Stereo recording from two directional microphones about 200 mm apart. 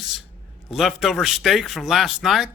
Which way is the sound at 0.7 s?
Centre (ahead or behind).